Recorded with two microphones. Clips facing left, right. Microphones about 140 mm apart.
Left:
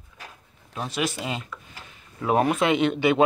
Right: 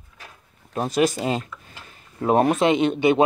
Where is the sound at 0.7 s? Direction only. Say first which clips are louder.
Right 7 dB; 40° right (ahead or behind).